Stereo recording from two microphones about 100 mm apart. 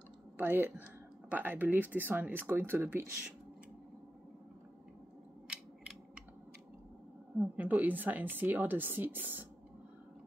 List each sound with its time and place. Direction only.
0.4 s a woman's voice: 20° right (ahead or behind)
5.5 s a sound: 10° right (ahead or behind)
7.3 s a woman's voice: 15° right (ahead or behind)